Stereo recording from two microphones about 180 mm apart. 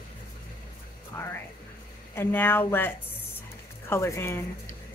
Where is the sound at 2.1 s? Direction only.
10° left (ahead or behind).